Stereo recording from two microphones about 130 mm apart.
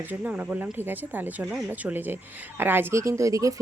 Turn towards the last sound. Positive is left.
turn(degrees=-25)  # may be behind; listen again after turning